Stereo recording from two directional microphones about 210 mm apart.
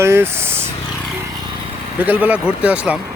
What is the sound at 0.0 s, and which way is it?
Speech, 10° right (ahead or behind).